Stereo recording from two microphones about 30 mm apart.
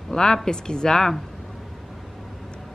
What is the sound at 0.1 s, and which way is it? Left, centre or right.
Speech, left.